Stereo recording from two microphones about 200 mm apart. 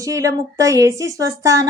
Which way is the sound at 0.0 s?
15° right (ahead or behind).